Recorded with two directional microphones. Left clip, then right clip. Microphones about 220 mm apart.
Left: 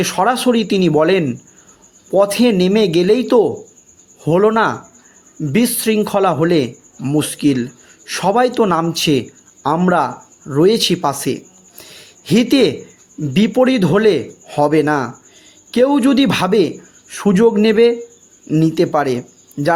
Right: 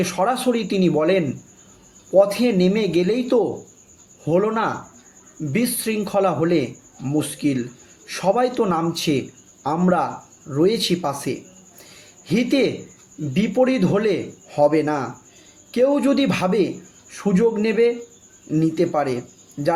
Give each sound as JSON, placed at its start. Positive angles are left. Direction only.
{"t": 0.0, "sound": "speech", "side_deg": 40}
{"t": 11.9, "sound": "a sound", "side_deg": 45}
{"t": 13.3, "sound": "speech", "side_deg": 45}